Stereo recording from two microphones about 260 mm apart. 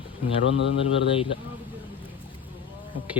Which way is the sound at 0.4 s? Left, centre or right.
Left.